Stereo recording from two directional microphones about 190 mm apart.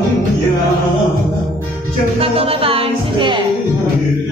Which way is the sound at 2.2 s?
30° right (ahead or behind).